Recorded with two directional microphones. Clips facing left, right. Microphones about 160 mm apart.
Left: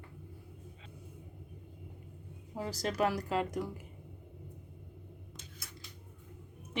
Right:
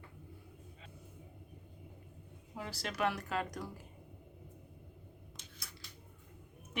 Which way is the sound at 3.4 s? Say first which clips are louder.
Left 5 dB; 25° left (ahead or behind).